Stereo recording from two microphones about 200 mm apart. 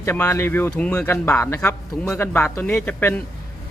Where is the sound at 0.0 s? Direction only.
10° left (ahead or behind).